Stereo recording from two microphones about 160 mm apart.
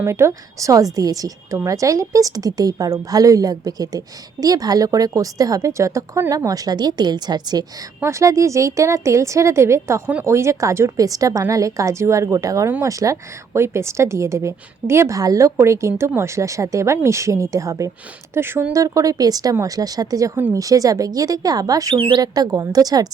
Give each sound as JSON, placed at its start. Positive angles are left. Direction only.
{"t": 0.0, "sound": "a woman's voice", "side_deg": -15}